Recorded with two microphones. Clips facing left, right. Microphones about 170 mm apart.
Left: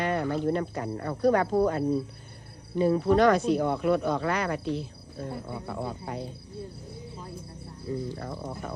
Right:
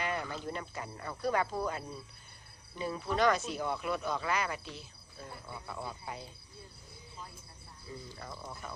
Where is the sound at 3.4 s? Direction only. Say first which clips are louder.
Left 11 dB; 50° left (ahead or behind).